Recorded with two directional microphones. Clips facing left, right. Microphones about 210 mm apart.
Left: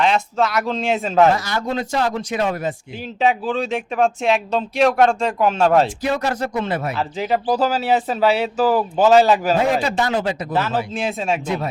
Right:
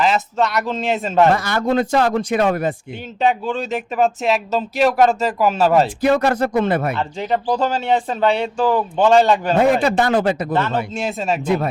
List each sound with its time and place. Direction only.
0.0 s speech: centre (ahead or behind)
1.4 s speech: 55° right (ahead or behind)
3.2 s speech: centre (ahead or behind)
6.0 s speech: 55° right (ahead or behind)
6.9 s speech: 5° left (ahead or behind)
9.8 s speech: 55° right (ahead or behind)
10.5 s speech: 5° left (ahead or behind)